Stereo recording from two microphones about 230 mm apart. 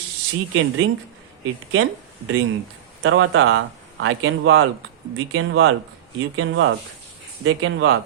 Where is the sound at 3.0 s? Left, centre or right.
Right.